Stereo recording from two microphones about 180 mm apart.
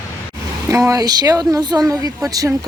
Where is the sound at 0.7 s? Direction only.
15° right (ahead or behind).